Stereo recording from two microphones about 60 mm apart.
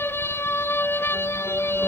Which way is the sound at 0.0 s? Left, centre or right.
Left.